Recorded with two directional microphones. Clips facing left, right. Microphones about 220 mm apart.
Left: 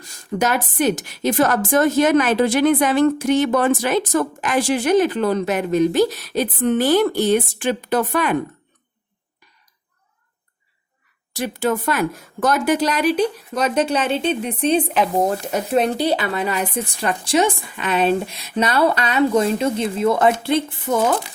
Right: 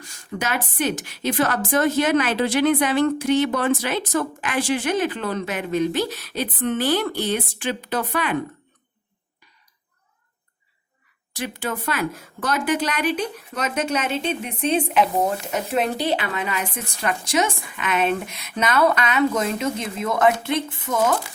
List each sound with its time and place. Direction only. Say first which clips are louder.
0.0 s a woman's voice: left 7 dB; 40° left (ahead or behind)
11.3 s speech: left 7 dB; 40° left (ahead or behind)